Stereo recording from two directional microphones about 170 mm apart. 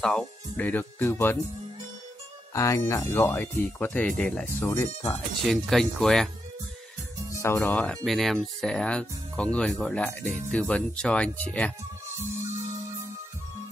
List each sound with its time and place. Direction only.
0.0 s speech: 5° left (ahead or behind)
2.5 s speech: 20° left (ahead or behind)
4.6 s speech: 15° left (ahead or behind)
5.5 s speech: centre (ahead or behind)
7.4 s speech: 10° left (ahead or behind)